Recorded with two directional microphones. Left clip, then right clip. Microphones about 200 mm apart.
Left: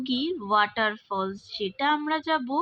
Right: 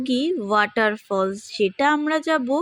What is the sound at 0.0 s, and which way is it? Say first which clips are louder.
A child's voice: right 6 dB; 20° right (ahead or behind).